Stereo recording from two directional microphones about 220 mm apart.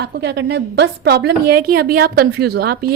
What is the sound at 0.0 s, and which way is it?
A woman's voice, 50° right (ahead or behind).